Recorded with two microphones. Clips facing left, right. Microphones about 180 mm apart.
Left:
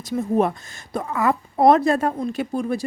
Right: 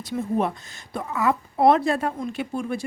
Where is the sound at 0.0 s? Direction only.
45° left (ahead or behind).